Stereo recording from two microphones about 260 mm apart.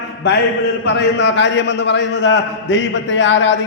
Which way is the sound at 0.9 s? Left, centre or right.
Left.